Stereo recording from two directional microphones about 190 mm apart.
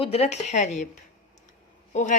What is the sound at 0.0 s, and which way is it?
Speech, 30° left (ahead or behind).